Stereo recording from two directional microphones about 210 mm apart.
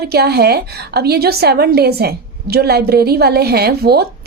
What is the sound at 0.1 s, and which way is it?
A woman's voice, 50° right (ahead or behind).